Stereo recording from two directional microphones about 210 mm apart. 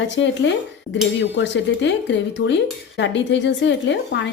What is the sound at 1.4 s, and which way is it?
A woman's voice, 55° left (ahead or behind).